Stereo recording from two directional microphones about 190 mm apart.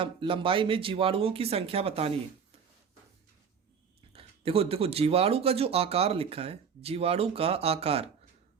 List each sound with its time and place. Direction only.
0.0 s speech: 25° right (ahead or behind)
4.1 s speech: 30° right (ahead or behind)